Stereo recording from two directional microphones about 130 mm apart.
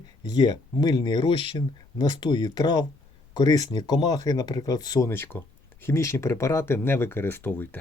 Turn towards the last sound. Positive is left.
turn(degrees=15)  # may be behind; listen again after turning